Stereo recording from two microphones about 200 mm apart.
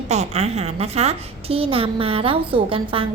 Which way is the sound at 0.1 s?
35° right (ahead or behind).